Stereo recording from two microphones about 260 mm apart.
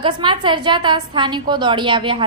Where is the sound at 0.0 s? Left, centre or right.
Centre.